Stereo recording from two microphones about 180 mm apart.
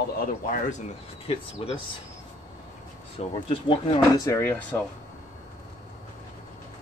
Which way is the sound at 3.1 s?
30° left (ahead or behind).